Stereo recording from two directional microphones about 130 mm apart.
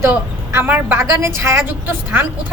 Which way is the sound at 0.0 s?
15° right (ahead or behind).